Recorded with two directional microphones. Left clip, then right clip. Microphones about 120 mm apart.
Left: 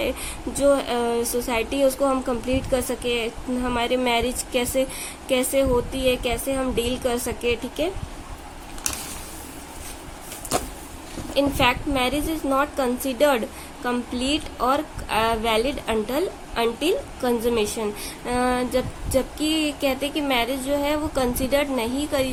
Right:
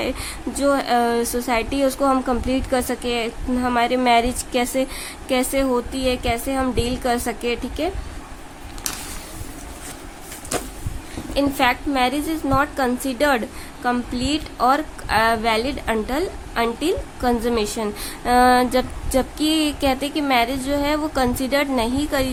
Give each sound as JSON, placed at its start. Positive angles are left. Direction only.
{"t": 0.0, "sound": "a woman's voice", "side_deg": -30}
{"t": 11.3, "sound": "a woman's voice", "side_deg": -20}
{"t": 18.3, "sound": "a woman's voice", "side_deg": -40}